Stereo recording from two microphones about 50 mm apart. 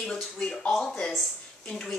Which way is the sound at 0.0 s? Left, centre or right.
Centre.